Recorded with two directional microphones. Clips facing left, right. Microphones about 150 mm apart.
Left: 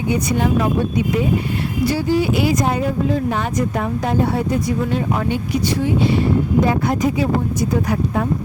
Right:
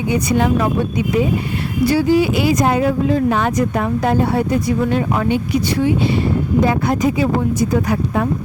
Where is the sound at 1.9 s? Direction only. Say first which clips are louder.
Right 4 dB; 90° right; by 5.2 s 70° right (ahead or behind).